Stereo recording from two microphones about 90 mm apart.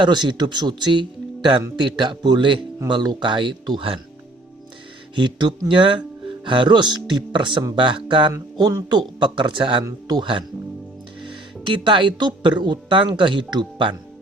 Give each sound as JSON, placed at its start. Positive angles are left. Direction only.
{"t": 0.0, "sound": "speech", "side_deg": -55}
{"t": 5.1, "sound": "speech", "side_deg": -60}
{"t": 8.3, "sound": "speech", "side_deg": -45}
{"t": 9.8, "sound": "speech", "side_deg": -50}
{"t": 11.6, "sound": "speech", "side_deg": -65}